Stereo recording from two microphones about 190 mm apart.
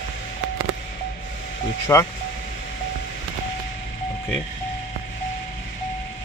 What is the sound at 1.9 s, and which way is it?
Speech, 15° left (ahead or behind).